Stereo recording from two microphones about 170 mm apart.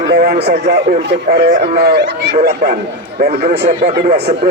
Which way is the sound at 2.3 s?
50° right (ahead or behind).